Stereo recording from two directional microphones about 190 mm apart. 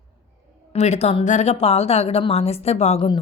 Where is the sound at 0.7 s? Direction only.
35° left (ahead or behind).